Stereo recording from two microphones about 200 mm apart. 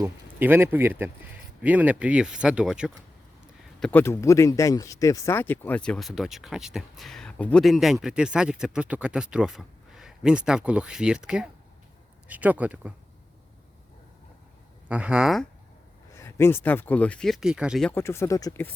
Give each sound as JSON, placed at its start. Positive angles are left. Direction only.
{"t": 0.0, "sound": "speech", "side_deg": -10}
{"t": 14.8, "sound": "speech", "side_deg": -5}
{"t": 16.1, "sound": "speech", "side_deg": 15}
{"t": 17.9, "sound": "speech", "side_deg": 10}